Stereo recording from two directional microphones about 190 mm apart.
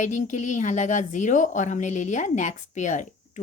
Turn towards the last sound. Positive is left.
turn(degrees=40)  # may be behind; listen again after turning